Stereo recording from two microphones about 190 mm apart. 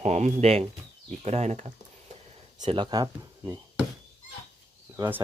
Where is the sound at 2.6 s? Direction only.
25° right (ahead or behind).